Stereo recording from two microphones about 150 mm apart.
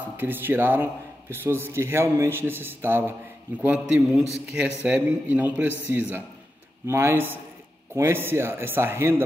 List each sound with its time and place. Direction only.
0.2 s a man's voice: 15° right (ahead or behind)